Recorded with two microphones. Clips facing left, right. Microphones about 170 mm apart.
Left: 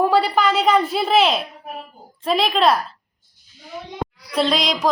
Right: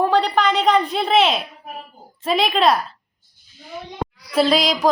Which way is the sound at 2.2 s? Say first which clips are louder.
Even; centre (ahead or behind).